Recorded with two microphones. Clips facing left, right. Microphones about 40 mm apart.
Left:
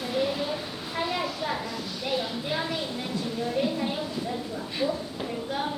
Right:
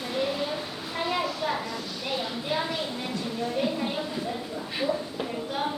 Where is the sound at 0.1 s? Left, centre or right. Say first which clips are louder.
Left 1 dB; centre.